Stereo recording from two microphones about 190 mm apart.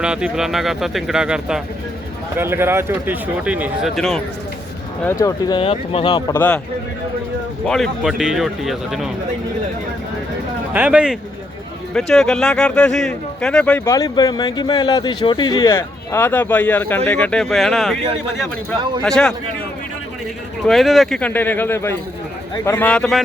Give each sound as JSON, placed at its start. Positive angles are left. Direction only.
{"t": 0.0, "sound": "speech", "side_deg": -5}
{"t": 5.0, "sound": "speech", "side_deg": 15}
{"t": 6.3, "sound": "speech", "side_deg": 10}
{"t": 7.7, "sound": "speech", "side_deg": 0}
{"t": 10.7, "sound": "speech", "side_deg": -10}
{"t": 19.0, "sound": "speech", "side_deg": 5}
{"t": 20.7, "sound": "speech", "side_deg": 0}
{"t": 22.8, "sound": "speech", "side_deg": 5}